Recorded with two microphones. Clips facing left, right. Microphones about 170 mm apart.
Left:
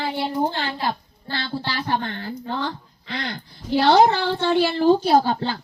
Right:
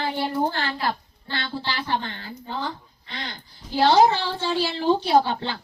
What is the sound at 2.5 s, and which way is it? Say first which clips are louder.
Speech: left 1 dB; 75° left (ahead or behind).